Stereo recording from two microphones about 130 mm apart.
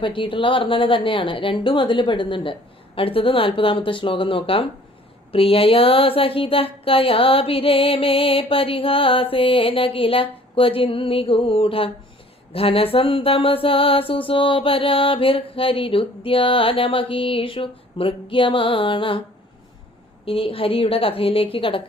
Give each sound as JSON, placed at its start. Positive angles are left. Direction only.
{"t": 0.0, "sound": "a woman's voice", "side_deg": 40}
{"t": 5.3, "sound": "mantra", "side_deg": 45}
{"t": 20.2, "sound": "mantra", "side_deg": 45}